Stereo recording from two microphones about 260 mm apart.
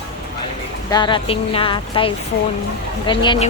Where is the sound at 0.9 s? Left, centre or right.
Centre.